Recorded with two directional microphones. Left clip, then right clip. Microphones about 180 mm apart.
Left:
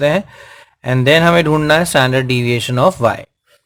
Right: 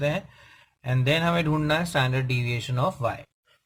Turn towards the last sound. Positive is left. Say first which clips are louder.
# left 14 dB
turn(degrees=30)  # may be behind; listen again after turning